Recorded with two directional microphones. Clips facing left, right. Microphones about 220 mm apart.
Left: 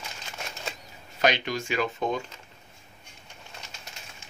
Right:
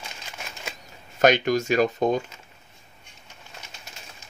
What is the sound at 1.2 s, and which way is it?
Speech, 45° right (ahead or behind).